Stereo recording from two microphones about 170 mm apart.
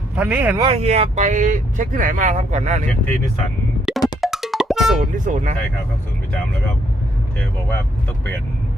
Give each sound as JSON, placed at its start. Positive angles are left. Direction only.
{"t": 0.2, "sound": "speech", "side_deg": -10}
{"t": 0.6, "sound": "speech", "side_deg": -35}
{"t": 3.9, "sound": "music", "side_deg": -5}
{"t": 4.9, "sound": "speech", "side_deg": -50}